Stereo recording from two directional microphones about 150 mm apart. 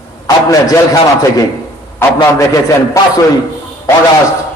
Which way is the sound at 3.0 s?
20° left (ahead or behind).